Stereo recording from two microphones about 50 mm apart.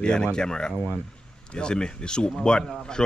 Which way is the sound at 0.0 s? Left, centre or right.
Centre.